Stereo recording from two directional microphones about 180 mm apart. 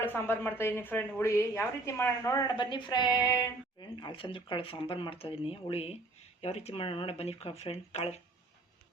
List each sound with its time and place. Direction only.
0.0 s speech: 10° left (ahead or behind); by 8.2 s 35° left (ahead or behind)